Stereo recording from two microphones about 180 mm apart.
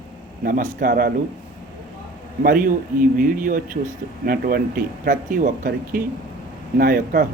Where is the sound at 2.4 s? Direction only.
50° right (ahead or behind).